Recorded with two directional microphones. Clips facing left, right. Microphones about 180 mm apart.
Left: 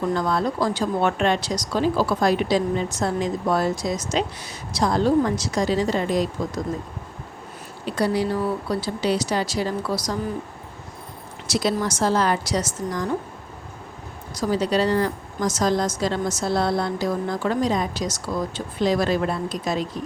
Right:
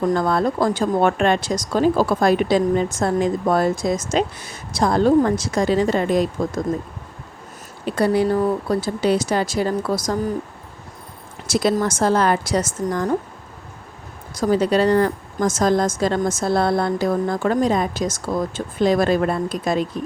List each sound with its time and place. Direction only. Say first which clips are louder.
0.0 s speech: right 4 dB; 50° right (ahead or behind)
7.9 s speech: right 4 dB; 55° right (ahead or behind)
11.4 s speech: right 4 dB; 50° right (ahead or behind)
14.3 s speech: right 4 dB; 50° right (ahead or behind)